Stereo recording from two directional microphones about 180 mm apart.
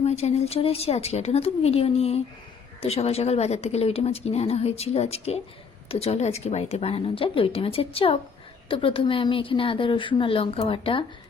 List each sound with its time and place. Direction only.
0.0 s a woman's voice: 35° left (ahead or behind)